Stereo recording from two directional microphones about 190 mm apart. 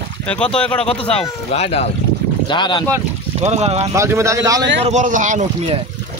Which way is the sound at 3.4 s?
35° right (ahead or behind).